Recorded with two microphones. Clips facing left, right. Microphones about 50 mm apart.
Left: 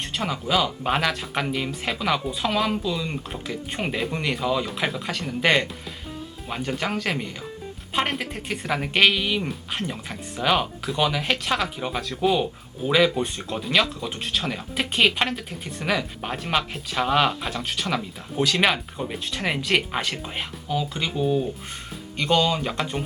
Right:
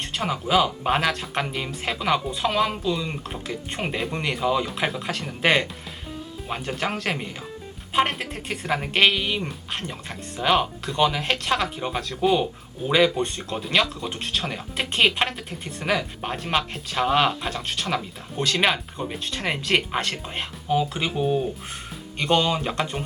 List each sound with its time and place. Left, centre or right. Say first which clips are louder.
0.1 s a woman's voice: right 2 dB; centre
20.7 s speech: right 4 dB; centre
22.2 s a woman's voice: even; centre